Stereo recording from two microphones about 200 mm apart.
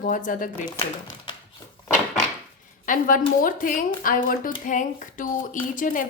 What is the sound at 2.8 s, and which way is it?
A woman's voice, 40° left (ahead or behind).